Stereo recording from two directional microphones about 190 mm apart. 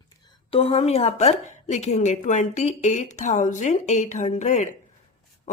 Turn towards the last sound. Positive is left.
turn(degrees=40)  # may be behind; listen again after turning